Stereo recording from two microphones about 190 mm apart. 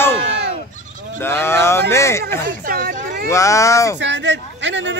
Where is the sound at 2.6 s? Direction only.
50° right (ahead or behind).